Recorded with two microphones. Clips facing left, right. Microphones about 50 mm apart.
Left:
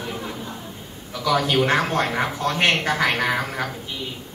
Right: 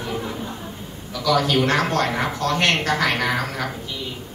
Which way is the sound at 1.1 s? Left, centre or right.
Centre.